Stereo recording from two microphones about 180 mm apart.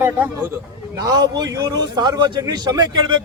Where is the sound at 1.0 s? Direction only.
20° right (ahead or behind).